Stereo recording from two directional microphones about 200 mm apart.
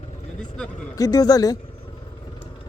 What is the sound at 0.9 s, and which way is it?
Speech, 20° left (ahead or behind).